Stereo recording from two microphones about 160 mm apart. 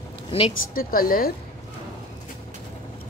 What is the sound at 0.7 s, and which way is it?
Speech, 65° left (ahead or behind).